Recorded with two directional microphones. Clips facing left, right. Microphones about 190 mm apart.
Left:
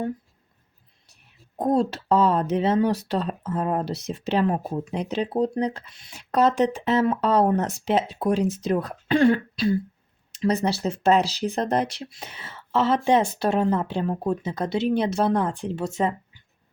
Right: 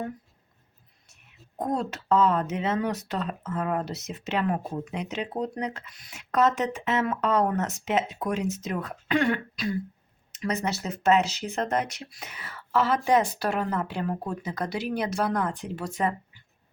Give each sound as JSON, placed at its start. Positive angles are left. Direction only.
{"t": 1.0, "sound": "speech", "side_deg": 35}